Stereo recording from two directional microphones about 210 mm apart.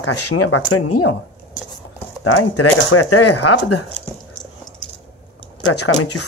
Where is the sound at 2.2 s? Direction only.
90° left.